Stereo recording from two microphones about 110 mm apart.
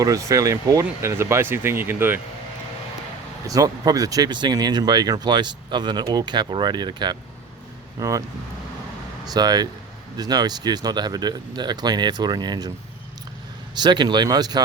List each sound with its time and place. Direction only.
0.0 s speech: 30° right (ahead or behind)
3.4 s speech: 35° right (ahead or behind)
7.9 s speech: 30° right (ahead or behind)
9.2 s speech: 35° right (ahead or behind)
13.7 s speech: 40° right (ahead or behind)